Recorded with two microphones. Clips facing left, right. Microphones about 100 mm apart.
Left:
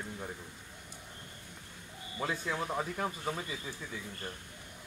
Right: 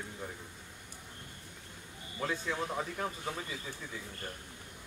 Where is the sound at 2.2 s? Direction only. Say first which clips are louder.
Even; 10° left (ahead or behind).